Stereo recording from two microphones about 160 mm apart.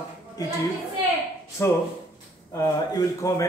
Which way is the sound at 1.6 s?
15° left (ahead or behind).